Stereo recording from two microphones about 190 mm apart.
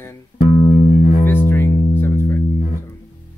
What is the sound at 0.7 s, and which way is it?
Music, 30° left (ahead or behind).